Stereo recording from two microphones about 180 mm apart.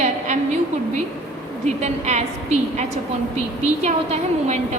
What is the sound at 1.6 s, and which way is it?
A woman's voice, 40° right (ahead or behind).